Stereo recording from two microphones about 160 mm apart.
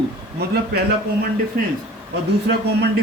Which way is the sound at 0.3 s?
90° right.